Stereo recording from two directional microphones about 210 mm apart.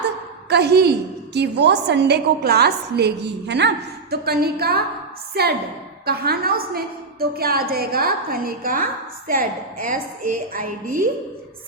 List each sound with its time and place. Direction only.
0.5 s a woman's voice: 50° right (ahead or behind)